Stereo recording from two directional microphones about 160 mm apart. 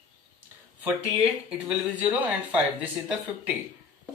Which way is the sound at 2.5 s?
10° right (ahead or behind).